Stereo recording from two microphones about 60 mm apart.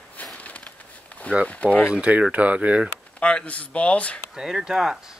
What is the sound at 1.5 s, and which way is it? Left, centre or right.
Speech, left.